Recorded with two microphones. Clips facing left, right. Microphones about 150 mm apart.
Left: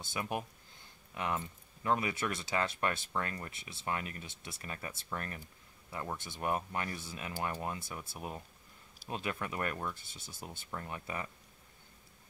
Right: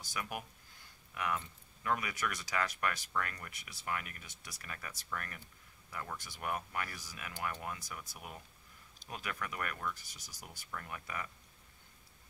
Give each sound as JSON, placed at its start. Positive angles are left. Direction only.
{"t": 0.0, "sound": "speech", "side_deg": 25}